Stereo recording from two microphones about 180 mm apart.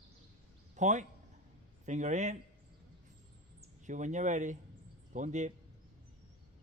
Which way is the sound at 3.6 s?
45° right (ahead or behind).